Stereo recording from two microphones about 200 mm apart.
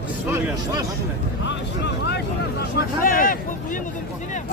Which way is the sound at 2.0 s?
55° left (ahead or behind).